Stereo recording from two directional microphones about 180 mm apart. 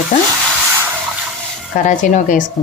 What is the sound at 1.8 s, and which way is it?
Speech, 45° left (ahead or behind).